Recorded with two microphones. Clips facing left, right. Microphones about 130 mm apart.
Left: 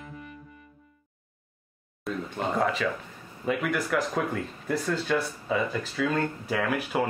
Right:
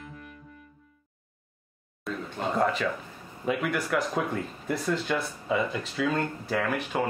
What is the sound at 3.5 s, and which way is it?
Speech, centre (ahead or behind).